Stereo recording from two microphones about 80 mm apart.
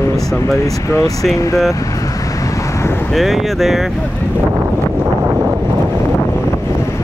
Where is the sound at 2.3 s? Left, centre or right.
Left.